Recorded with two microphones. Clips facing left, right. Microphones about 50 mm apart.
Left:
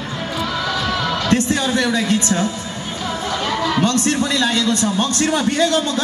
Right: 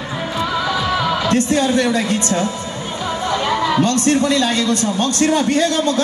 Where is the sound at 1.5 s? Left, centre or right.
Right.